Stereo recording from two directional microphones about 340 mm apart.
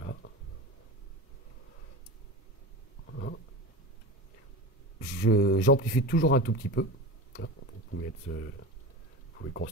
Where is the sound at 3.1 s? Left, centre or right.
Left.